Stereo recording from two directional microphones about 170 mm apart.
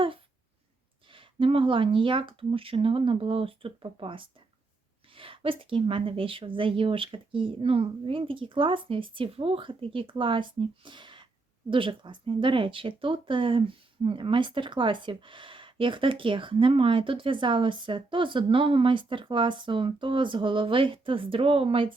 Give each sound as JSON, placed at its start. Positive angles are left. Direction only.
{"t": 1.1, "sound": "a woman's voice", "side_deg": -30}